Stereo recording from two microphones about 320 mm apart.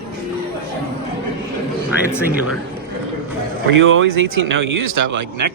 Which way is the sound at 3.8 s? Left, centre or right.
Right.